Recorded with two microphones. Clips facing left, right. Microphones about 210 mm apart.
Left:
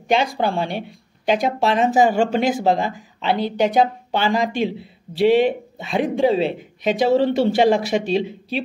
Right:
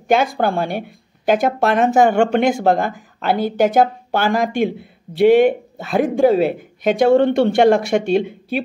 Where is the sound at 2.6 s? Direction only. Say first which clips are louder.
Right 3 dB; 55° right (ahead or behind).